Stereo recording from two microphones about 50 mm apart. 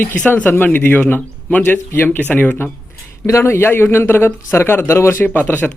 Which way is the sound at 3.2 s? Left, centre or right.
Left.